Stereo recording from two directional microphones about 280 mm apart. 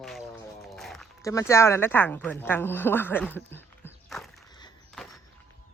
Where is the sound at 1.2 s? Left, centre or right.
Centre.